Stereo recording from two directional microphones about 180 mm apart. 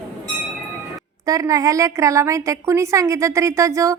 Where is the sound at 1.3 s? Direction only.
20° right (ahead or behind).